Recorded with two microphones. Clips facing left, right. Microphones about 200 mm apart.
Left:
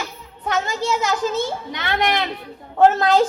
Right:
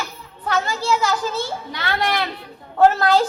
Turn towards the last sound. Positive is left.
turn(degrees=20)  # may be behind; listen again after turning